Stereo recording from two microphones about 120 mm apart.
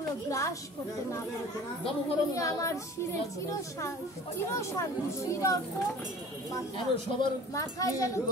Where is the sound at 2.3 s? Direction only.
25° left (ahead or behind).